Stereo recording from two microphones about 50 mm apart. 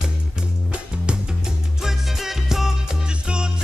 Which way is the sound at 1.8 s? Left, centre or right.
Centre.